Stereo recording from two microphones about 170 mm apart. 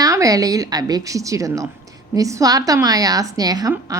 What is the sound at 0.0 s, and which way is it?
A woman's voice, 20° right (ahead or behind).